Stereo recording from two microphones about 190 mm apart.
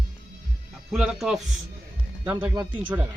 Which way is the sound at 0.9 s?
Centre (ahead or behind).